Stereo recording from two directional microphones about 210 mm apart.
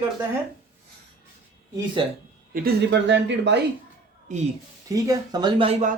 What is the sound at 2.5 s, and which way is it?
Speech, 45° right (ahead or behind).